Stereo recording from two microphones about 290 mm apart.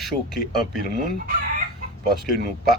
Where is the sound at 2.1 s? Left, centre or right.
Centre.